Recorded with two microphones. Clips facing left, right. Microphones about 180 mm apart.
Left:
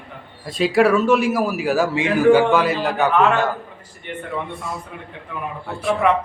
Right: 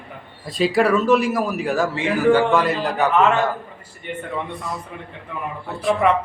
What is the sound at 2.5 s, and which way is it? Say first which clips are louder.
A man's voice: left 1 dB; centre (ahead or behind).